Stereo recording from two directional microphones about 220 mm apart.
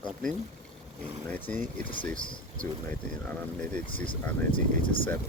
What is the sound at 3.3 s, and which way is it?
Speech, 5° left (ahead or behind).